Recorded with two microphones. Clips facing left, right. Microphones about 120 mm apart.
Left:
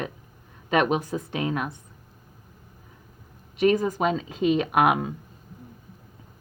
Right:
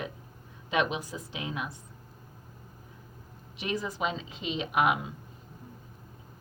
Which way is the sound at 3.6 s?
55° left (ahead or behind).